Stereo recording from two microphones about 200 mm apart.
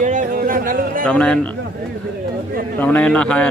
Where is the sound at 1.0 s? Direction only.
5° left (ahead or behind).